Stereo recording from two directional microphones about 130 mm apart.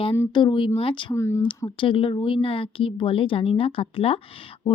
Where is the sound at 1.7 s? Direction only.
45° left (ahead or behind).